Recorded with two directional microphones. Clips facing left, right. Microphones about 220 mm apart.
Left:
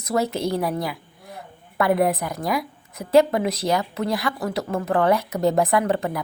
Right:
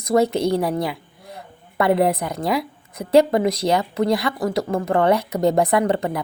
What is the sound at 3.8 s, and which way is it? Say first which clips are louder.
Speech: right 5 dB; 15° right (ahead or behind).